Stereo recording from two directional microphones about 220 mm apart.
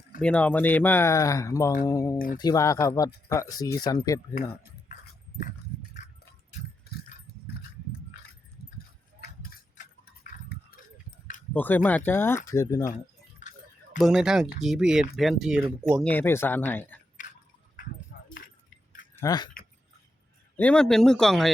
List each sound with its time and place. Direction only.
0.2 s speech: 5° left (ahead or behind)
2.1 s speech: 40° left (ahead or behind)
2.4 s speech: 15° left (ahead or behind)
7.3 s a sound: 45° left (ahead or behind)
9.2 s tick-tock: 40° left (ahead or behind)
11.5 s speech: 10° left (ahead or behind)
14.0 s speech: 5° right (ahead or behind)
16.0 s speech: 10° left (ahead or behind)
18.1 s keys jangling: 45° left (ahead or behind)
19.1 s speech: 15° left (ahead or behind)
20.6 s speech: 5° left (ahead or behind)